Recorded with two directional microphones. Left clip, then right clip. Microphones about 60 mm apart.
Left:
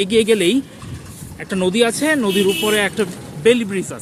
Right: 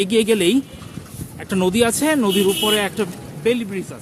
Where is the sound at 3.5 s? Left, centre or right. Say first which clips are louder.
Left 5 dB; left.